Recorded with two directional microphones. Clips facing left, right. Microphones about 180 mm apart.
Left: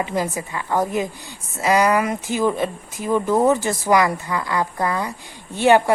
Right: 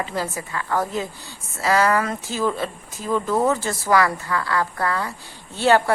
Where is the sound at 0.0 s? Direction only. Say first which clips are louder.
Left 3 dB; 15° left (ahead or behind).